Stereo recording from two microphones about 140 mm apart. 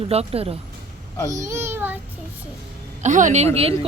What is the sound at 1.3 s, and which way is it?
Speech, 20° right (ahead or behind).